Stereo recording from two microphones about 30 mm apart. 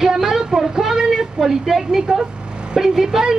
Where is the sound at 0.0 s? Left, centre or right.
Centre.